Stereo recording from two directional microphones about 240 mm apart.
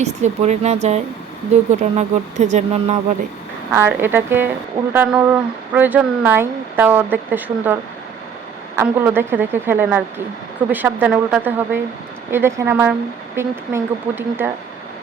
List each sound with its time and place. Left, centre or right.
0.0 s speech: right
3.7 s speech: centre